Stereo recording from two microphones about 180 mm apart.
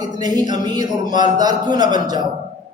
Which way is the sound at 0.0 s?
20° right (ahead or behind).